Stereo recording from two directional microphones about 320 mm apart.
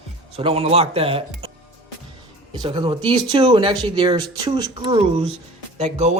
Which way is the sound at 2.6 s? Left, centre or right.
Centre.